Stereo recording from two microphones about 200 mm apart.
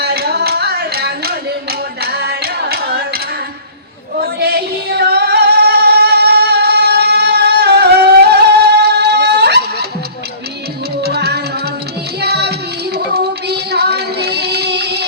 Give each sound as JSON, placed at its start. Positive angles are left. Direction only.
{"t": 0.0, "sound": "a sound", "side_deg": -55}
{"t": 2.0, "sound": "carnatic music", "side_deg": -50}
{"t": 4.2, "sound": "female singing", "side_deg": -55}
{"t": 8.8, "sound": "music", "side_deg": -55}
{"t": 11.0, "sound": "music", "side_deg": -55}